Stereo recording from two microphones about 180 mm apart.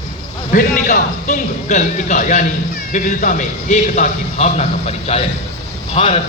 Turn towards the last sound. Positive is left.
turn(degrees=35)  # may be behind; listen again after turning